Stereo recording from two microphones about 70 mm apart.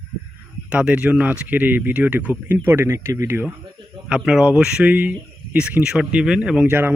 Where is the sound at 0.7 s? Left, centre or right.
Centre.